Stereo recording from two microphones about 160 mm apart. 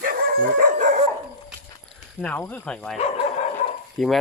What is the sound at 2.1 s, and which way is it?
Speech, 10° left (ahead or behind).